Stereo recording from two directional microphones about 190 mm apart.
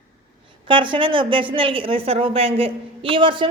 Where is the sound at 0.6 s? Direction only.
25° right (ahead or behind).